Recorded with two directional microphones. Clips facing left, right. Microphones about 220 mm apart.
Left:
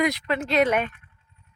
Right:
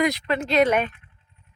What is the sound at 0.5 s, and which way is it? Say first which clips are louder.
Speech: right 2 dB; 40° right (ahead or behind).